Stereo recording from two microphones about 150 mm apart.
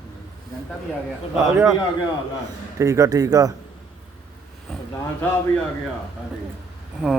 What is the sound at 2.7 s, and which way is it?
Speech, 20° right (ahead or behind).